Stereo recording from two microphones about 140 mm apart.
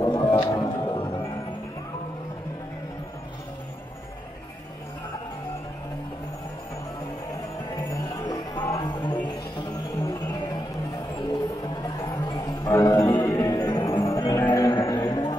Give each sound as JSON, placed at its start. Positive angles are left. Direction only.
{"t": 0.0, "sound": "music", "side_deg": 30}
{"t": 7.7, "sound": "music", "side_deg": 25}
{"t": 11.6, "sound": "music", "side_deg": 35}